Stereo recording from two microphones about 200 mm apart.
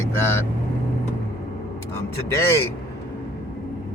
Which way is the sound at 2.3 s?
15° left (ahead or behind).